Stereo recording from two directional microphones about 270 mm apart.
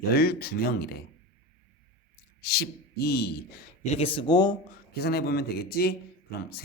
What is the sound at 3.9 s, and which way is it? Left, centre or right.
Speech, centre.